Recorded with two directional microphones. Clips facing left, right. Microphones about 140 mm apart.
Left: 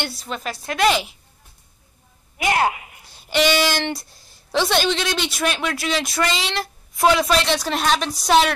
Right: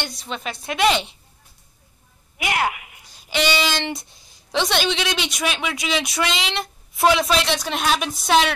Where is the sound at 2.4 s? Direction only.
35° left (ahead or behind).